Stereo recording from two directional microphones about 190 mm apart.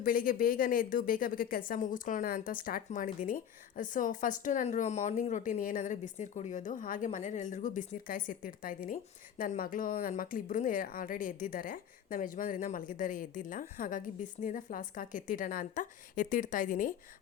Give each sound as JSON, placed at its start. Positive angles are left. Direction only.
{"t": 0.0, "sound": "speech", "side_deg": 50}